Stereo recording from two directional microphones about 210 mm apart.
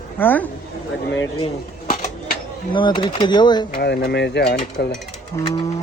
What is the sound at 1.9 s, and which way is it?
Typewriter, 40° left (ahead or behind).